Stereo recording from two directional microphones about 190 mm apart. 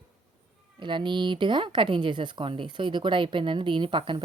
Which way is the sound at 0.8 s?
25° right (ahead or behind).